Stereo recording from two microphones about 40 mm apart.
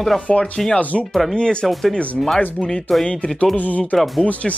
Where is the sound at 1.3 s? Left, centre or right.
Centre.